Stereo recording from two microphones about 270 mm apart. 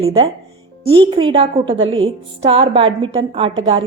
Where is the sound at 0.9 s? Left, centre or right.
Centre.